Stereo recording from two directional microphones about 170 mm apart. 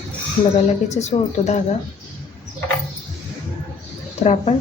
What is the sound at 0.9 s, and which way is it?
Speech, 40° left (ahead or behind).